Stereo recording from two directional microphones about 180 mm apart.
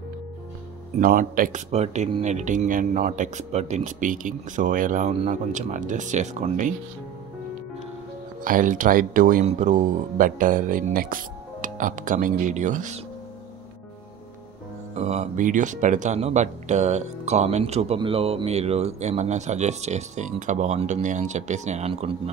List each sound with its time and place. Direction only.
0.9 s speech: 50° right (ahead or behind)
8.5 s speech: 50° right (ahead or behind)
15.0 s speech: 40° right (ahead or behind)